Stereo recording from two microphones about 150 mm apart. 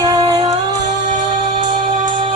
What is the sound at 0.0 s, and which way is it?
Music, 25° right (ahead or behind).